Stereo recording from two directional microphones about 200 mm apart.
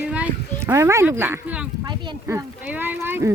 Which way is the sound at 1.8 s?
25° right (ahead or behind).